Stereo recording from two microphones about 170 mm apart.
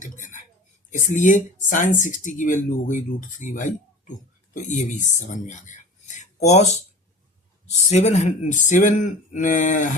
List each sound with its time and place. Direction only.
0.0 s dishes: 50° left (ahead or behind)
0.9 s speech: 50° left (ahead or behind)
7.9 s speech: 40° left (ahead or behind)